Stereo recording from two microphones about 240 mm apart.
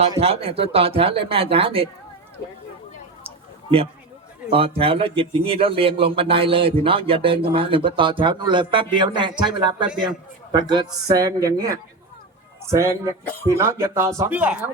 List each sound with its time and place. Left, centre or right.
0.0 s a man's voice: right
3.2 s a sound: right
4.5 s a man's voice: right; by 14.6 s centre